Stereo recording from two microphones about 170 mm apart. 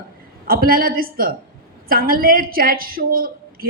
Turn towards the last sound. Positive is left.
turn(degrees=-60)  # may be behind; listen again after turning